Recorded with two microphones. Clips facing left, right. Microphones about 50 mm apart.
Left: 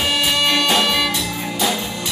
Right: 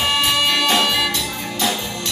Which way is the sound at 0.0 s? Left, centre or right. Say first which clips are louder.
Even; centre.